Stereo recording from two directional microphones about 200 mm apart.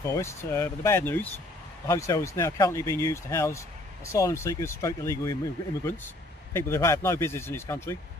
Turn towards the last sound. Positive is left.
turn(degrees=10)  # may be behind; listen again after turning